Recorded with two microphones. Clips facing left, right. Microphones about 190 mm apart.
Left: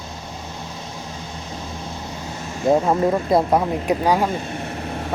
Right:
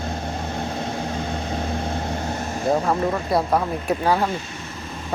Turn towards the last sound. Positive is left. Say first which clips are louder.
# left 2 dB
turn(degrees=15)  # may be behind; listen again after turning